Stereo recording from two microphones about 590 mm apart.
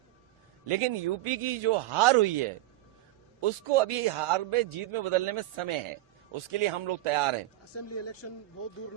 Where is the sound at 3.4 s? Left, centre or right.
Right.